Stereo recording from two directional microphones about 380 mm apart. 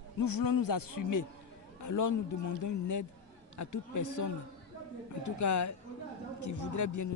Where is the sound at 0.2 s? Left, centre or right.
Left.